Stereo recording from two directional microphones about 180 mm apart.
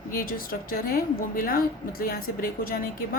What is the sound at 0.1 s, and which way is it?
A woman's voice, 50° left (ahead or behind).